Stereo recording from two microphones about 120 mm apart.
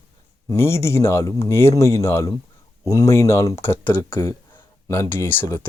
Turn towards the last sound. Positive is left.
turn(degrees=20)  # may be behind; listen again after turning